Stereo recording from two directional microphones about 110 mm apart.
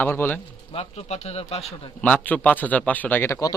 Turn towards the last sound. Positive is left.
turn(degrees=20)  # may be behind; listen again after turning